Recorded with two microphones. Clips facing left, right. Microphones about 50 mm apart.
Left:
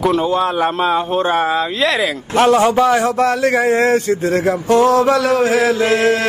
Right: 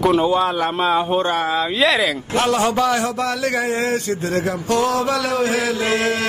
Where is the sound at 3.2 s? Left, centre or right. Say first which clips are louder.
Left 6 dB; left.